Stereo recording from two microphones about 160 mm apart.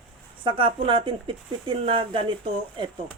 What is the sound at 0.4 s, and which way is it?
Speech, 30° right (ahead or behind).